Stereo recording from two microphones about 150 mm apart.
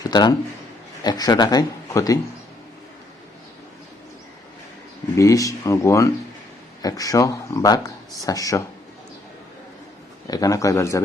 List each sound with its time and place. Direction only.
0.0 s speech: 25° left (ahead or behind)
5.1 s speech: 20° left (ahead or behind)
10.2 s speech: 25° left (ahead or behind)